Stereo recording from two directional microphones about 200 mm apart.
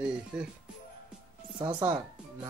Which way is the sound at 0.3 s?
5° right (ahead or behind).